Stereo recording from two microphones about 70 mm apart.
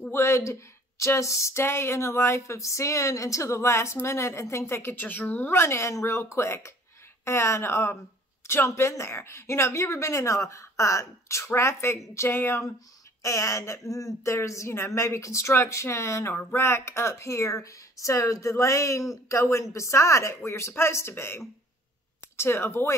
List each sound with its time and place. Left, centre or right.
0.1 s speech: left
5.5 s speech: left
13.2 s speech: left